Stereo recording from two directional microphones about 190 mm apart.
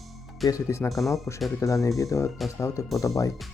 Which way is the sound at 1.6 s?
15° left (ahead or behind).